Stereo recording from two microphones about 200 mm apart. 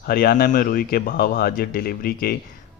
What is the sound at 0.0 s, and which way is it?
Speech, 50° left (ahead or behind).